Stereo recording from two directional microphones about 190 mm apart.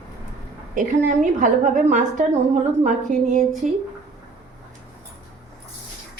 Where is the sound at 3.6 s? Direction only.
40° right (ahead or behind).